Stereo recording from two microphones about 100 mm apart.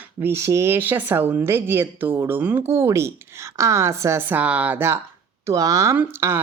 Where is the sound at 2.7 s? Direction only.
30° right (ahead or behind).